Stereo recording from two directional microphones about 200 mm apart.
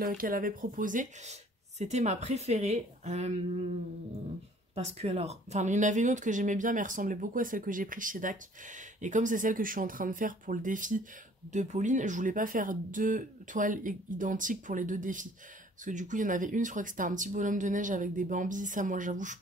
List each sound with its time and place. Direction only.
0.0 s speech: 45° right (ahead or behind)
4.7 s speech: 30° right (ahead or behind)